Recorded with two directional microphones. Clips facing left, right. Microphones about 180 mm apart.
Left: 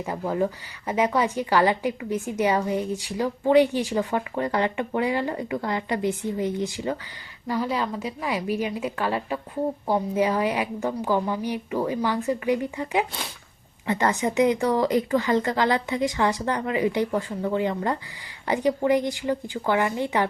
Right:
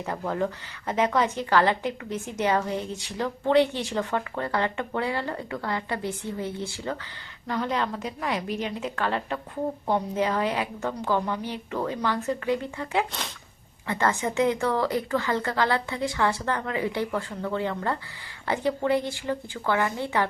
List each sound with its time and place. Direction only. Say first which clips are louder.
0.0 s a woman's voice: left 3 dB; 10° left (ahead or behind)